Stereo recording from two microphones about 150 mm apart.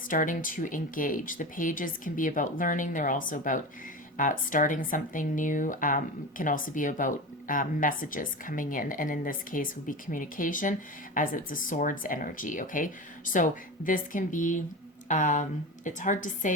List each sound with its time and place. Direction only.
0.1 s speech: 60° left (ahead or behind)